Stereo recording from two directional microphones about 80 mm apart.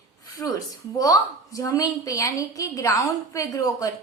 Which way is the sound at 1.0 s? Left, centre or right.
Left.